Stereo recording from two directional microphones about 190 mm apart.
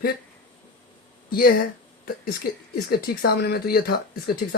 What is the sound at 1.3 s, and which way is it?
Speech, 50° left (ahead or behind).